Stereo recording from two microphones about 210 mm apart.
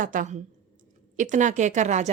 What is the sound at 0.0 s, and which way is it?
A woman's voice, 40° right (ahead or behind).